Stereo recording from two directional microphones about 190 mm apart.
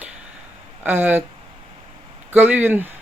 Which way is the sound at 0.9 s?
10° right (ahead or behind).